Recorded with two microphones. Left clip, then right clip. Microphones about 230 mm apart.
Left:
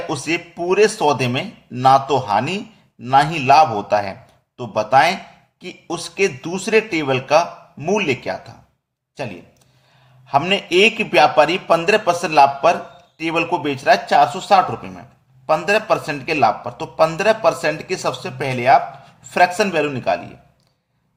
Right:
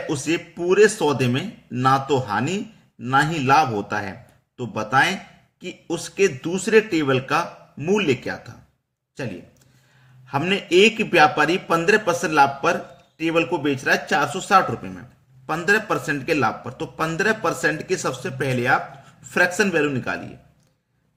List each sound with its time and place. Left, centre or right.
0.1 s a man's voice: centre